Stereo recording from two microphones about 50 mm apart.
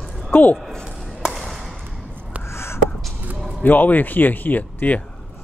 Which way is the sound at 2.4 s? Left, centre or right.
Left.